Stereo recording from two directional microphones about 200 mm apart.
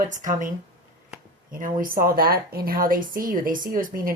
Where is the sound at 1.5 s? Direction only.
45° right (ahead or behind).